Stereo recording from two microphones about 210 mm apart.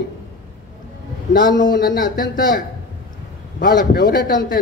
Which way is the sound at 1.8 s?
45° left (ahead or behind).